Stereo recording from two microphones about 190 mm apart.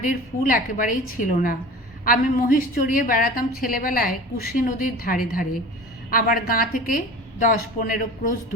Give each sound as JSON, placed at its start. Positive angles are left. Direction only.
{"t": 0.0, "sound": "a woman's voice", "side_deg": 45}